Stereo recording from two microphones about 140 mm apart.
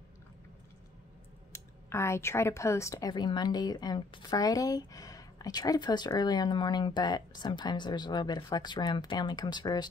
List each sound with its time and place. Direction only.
1.5 s speech: 20° left (ahead or behind)